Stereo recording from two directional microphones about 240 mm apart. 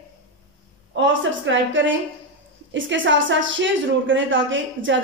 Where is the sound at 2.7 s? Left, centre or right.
Right.